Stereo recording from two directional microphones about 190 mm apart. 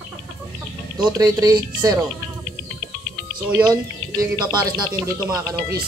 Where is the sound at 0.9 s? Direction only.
20° right (ahead or behind).